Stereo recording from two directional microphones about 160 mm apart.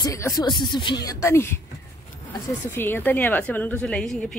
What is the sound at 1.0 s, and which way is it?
Speech, 15° left (ahead or behind).